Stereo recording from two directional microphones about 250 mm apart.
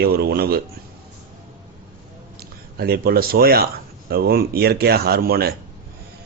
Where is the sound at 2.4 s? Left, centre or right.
Right.